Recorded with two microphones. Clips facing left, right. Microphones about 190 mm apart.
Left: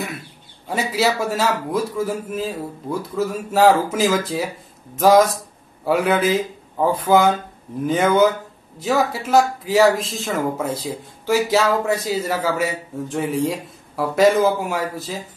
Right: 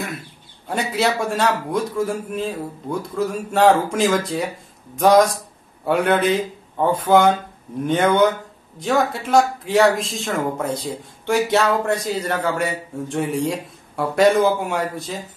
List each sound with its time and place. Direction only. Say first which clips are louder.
0.7 s speech: left 1 dB; 5° left (ahead or behind)